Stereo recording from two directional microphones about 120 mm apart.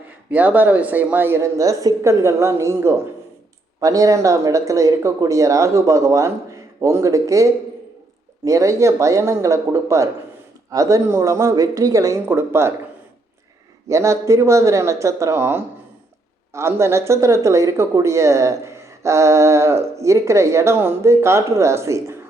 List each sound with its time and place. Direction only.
0.3 s speech: 15° right (ahead or behind)
13.8 s speech: 25° right (ahead or behind)